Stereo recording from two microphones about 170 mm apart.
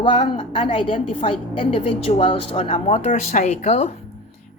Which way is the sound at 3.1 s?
45° left (ahead or behind).